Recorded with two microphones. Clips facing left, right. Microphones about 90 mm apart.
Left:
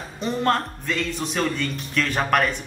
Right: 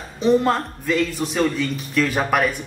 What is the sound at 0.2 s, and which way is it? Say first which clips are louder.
Speech: right 5 dB; centre (ahead or behind).